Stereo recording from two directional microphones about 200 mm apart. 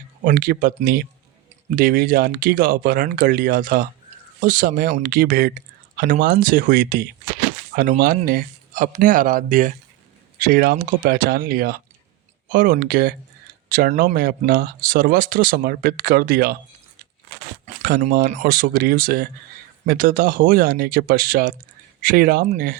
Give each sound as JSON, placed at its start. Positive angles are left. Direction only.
{"t": 0.3, "sound": "speech", "side_deg": -45}
{"t": 17.8, "sound": "speech", "side_deg": -45}